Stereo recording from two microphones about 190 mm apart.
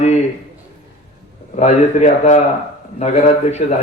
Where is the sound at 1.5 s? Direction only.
35° left (ahead or behind).